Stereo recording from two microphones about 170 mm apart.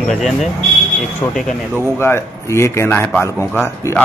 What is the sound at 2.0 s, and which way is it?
A man's voice, 15° left (ahead or behind).